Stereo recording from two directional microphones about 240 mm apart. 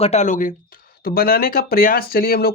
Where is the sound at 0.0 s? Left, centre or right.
Left.